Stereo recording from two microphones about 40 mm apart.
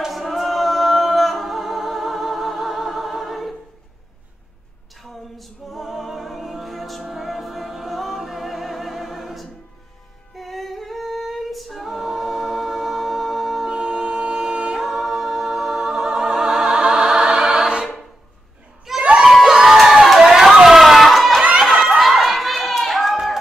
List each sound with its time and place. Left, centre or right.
0.1 s a capella: centre
5.0 s music: centre
10.3 s singing: centre
13.7 s music: centre
14.8 s a capella: centre
19.1 s a sound: centre